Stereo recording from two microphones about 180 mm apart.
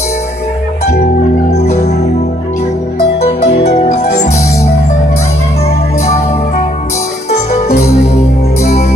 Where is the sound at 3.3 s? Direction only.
35° left (ahead or behind).